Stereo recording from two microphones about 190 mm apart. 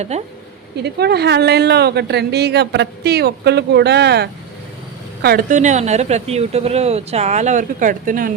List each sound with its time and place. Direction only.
0.1 s speech: 35° right (ahead or behind)
0.8 s a woman's voice: 60° right (ahead or behind)